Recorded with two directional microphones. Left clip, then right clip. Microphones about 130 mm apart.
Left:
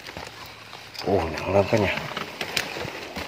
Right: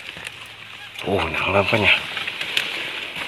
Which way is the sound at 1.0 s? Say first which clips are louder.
Right 3 dB; centre (ahead or behind).